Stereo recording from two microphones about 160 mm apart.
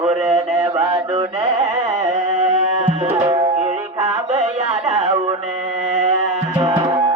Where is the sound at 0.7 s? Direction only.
25° right (ahead or behind).